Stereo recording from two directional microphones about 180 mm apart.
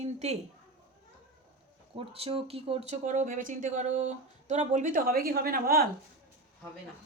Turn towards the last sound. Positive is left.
turn(degrees=-55)  # may be behind; listen again after turning